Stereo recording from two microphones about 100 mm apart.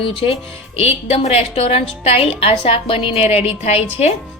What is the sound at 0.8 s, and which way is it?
A woman's voice, 90° left.